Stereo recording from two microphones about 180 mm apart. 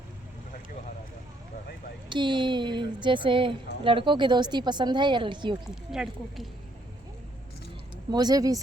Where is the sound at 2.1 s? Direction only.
25° right (ahead or behind).